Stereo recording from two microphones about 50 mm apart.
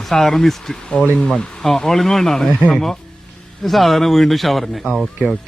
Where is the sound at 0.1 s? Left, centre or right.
Centre.